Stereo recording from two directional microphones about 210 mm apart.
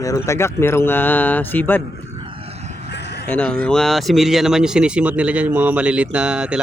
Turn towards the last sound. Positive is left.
turn(degrees=-5)  # may be behind; listen again after turning